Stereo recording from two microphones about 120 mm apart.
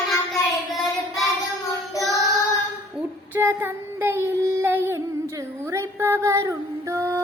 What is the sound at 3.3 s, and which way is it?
Child singing, 20° right (ahead or behind).